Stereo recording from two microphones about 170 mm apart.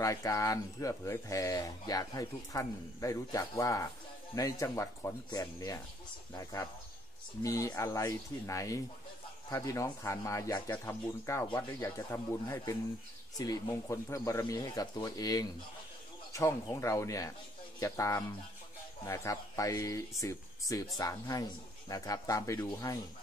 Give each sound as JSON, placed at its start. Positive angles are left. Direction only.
{"t": 0.0, "sound": "speech", "side_deg": 20}